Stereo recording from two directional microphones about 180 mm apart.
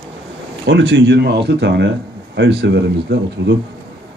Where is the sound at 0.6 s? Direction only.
70° right (ahead or behind).